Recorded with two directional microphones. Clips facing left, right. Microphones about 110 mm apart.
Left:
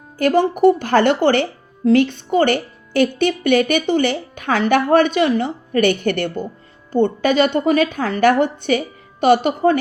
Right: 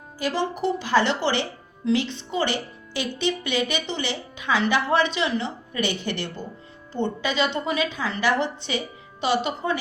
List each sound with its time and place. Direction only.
0.2 s speech: 55° left (ahead or behind)